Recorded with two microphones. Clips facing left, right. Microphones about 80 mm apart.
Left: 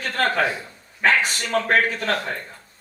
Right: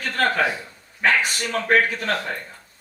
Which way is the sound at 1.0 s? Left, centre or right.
Left.